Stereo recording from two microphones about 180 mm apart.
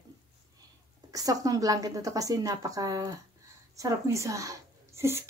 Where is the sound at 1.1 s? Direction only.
20° right (ahead or behind).